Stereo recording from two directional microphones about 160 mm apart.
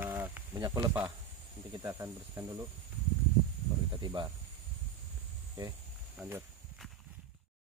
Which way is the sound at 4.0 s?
30° right (ahead or behind).